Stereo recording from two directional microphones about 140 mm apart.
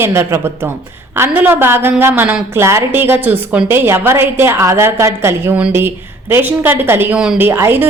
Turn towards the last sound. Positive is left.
turn(degrees=-15)  # may be behind; listen again after turning